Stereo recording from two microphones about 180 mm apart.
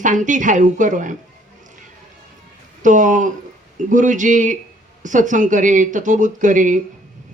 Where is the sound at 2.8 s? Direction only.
45° right (ahead or behind).